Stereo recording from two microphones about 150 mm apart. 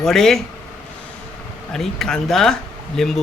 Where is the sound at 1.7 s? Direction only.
5° left (ahead or behind).